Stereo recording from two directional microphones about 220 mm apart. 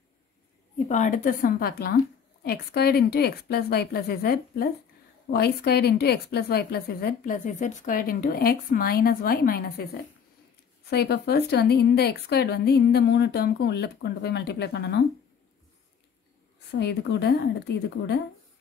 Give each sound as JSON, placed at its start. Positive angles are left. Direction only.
{"t": 0.8, "sound": "a woman's voice", "side_deg": 35}
{"t": 10.9, "sound": "a woman's voice", "side_deg": 50}
{"t": 16.7, "sound": "a woman's voice", "side_deg": 50}